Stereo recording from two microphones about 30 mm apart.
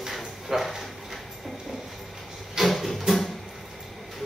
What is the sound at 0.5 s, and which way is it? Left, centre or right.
Speech, centre.